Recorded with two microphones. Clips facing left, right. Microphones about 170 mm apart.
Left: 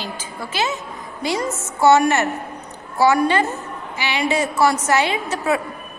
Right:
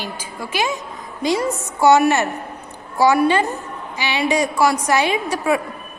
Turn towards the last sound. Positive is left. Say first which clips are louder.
# right 2 dB
turn(degrees=-15)  # may be behind; listen again after turning